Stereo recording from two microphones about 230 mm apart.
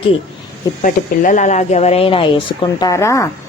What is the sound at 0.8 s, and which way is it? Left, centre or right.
A woman's voice, left.